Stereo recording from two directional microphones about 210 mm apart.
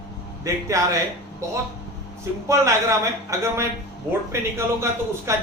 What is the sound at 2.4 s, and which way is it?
A man's voice, 15° right (ahead or behind).